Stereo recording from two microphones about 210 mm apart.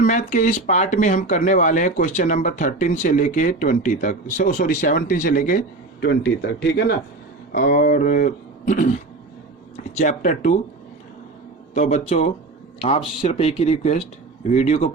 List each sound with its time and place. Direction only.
0.0 s speech: 35° left (ahead or behind); by 6.9 s 50° left (ahead or behind)
7.5 s speech: 40° left (ahead or behind)
10.0 s speech: 35° left (ahead or behind)
11.7 s speech: 35° left (ahead or behind)